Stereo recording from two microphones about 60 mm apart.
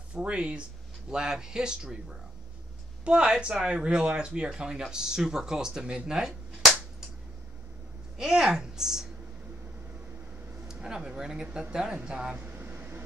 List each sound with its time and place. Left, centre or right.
0.1 s speech: centre
8.2 s speech: centre
10.7 s speech: centre
12.4 s vehicle: right